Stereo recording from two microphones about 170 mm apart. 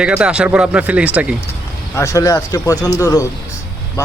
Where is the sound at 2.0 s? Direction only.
20° left (ahead or behind).